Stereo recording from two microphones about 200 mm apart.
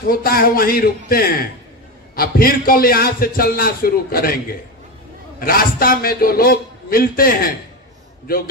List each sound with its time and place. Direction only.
0.1 s a man's voice: 50° left (ahead or behind)
5.4 s a man's voice: 45° left (ahead or behind)